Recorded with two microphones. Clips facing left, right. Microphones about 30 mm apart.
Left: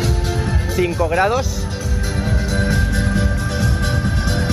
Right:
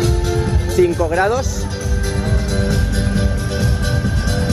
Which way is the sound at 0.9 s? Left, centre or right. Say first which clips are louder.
Right 1 dB; left.